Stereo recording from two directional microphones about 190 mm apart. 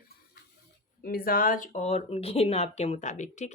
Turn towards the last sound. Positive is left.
turn(degrees=40)  # may be behind; listen again after turning